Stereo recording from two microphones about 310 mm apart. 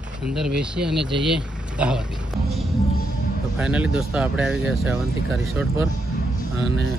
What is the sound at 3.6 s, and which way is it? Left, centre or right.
Speech, centre.